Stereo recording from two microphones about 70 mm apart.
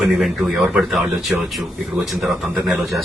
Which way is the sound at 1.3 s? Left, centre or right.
Centre.